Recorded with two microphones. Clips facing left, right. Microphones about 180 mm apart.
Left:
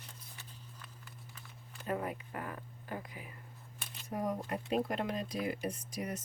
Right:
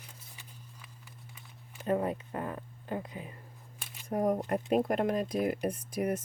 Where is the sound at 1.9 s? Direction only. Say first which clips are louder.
Right 7 dB; 25° right (ahead or behind).